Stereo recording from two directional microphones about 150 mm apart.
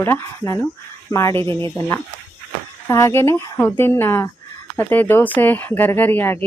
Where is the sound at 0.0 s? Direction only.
15° left (ahead or behind).